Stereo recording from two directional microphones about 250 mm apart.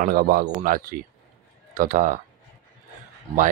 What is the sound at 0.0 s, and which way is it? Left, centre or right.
Speech, right.